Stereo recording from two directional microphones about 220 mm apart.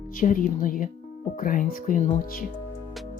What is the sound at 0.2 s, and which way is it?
Speech, 40° left (ahead or behind).